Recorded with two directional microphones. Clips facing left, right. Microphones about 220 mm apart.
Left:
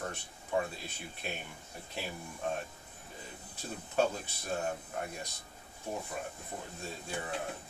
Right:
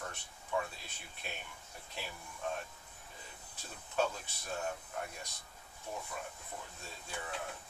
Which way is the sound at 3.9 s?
35° left (ahead or behind).